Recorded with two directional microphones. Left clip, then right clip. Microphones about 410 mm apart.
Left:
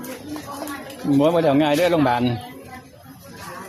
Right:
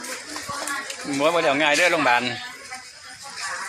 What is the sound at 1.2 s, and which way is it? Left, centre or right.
Speech, left.